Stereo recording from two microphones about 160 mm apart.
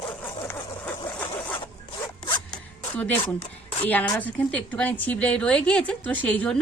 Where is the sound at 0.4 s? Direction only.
10° left (ahead or behind).